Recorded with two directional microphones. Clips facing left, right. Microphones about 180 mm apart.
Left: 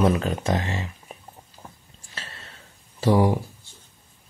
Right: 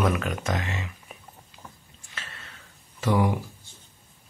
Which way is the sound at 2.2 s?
35° left (ahead or behind).